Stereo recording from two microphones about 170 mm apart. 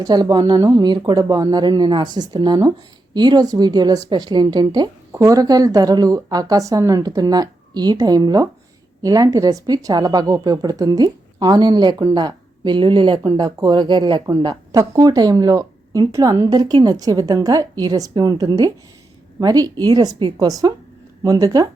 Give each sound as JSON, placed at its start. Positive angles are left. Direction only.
{"t": 0.0, "sound": "a woman's voice", "side_deg": -25}